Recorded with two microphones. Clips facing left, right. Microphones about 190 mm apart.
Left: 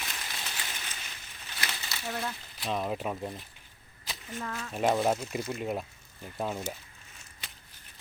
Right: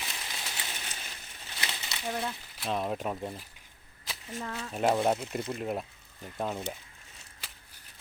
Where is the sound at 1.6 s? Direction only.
20° right (ahead or behind).